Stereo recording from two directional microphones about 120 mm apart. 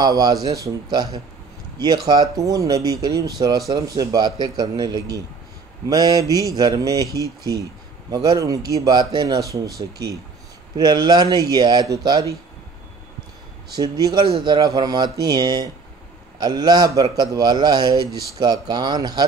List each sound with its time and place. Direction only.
0.0 s speech: 35° right (ahead or behind)
2.0 s speech: 30° right (ahead or behind)
13.7 s speech: 30° right (ahead or behind)